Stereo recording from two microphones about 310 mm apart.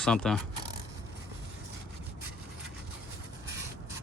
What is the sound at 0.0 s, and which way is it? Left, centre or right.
Speech, centre.